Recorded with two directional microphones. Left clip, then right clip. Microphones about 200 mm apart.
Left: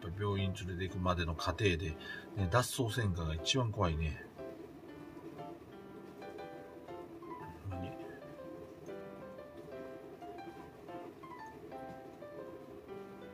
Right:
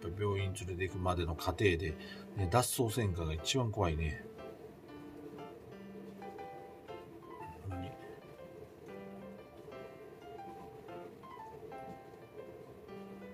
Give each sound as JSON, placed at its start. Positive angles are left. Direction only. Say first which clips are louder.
{"t": 0.2, "sound": "a man's voice", "louder": "right 1 dB", "side_deg": -10}